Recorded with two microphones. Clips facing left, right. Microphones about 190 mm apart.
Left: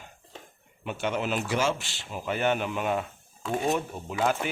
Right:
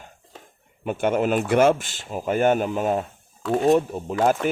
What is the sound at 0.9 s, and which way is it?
Speech, 50° right (ahead or behind).